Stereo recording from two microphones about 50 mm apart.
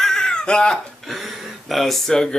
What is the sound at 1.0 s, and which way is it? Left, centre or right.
Speech, centre.